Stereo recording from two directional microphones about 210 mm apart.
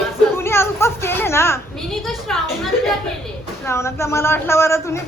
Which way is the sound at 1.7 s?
Centre (ahead or behind).